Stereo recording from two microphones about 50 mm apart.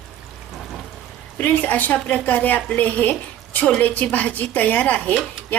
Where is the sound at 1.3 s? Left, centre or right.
Left.